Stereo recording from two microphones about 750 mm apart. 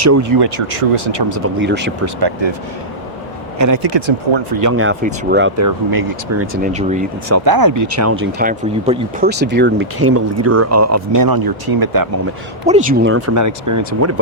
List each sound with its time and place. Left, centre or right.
0.0 s speech: right
0.7 s speech: right
1.6 s speech: centre
3.6 s speech: right
6.4 s speech: centre
7.3 s speech: right
12.6 s speech: centre